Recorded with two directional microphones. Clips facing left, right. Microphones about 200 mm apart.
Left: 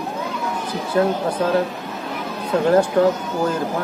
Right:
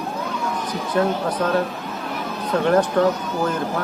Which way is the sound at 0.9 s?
25° left (ahead or behind).